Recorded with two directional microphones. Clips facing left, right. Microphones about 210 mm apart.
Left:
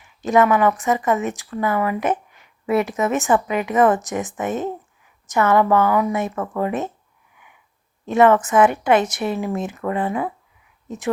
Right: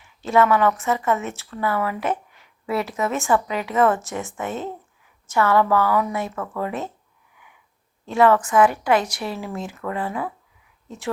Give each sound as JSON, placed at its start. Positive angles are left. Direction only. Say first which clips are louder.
{"t": 0.2, "sound": "a woman's voice", "louder": "left 2 dB", "side_deg": 15}
{"t": 8.0, "sound": "a woman's voice", "louder": "left 3 dB", "side_deg": 20}